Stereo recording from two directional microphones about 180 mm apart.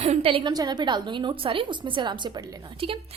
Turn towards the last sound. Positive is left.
turn(degrees=-30)  # may be behind; listen again after turning